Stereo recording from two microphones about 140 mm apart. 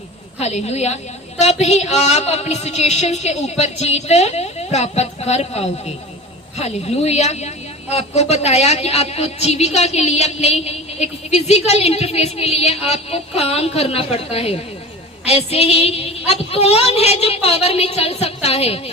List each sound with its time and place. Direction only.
0.3 s a woman's voice: 50° left (ahead or behind)